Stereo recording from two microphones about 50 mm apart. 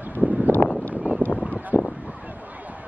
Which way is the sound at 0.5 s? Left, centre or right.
Left.